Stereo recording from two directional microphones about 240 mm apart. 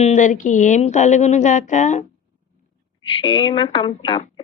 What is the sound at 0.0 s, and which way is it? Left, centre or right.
Speech, left.